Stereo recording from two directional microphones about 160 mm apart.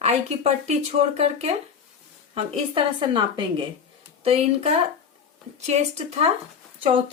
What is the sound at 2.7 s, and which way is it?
Speech, 30° right (ahead or behind).